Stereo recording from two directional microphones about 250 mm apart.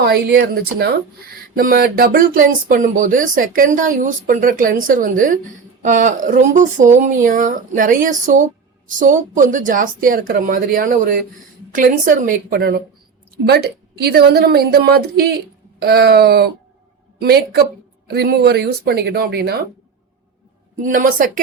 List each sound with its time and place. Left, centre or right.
0.0 s speech: right
20.8 s speech: right